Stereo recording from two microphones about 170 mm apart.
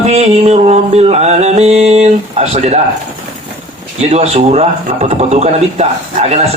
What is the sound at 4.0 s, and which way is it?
Speech, 40° right (ahead or behind).